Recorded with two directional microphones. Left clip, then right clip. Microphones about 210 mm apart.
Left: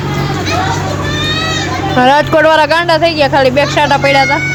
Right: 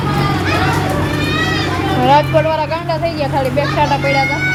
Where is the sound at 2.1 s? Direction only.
35° left (ahead or behind).